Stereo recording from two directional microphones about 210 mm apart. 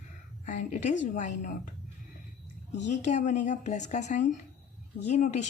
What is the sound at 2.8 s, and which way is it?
Speech, 35° left (ahead or behind).